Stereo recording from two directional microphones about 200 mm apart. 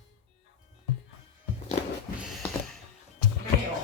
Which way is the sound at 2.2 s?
Centre (ahead or behind).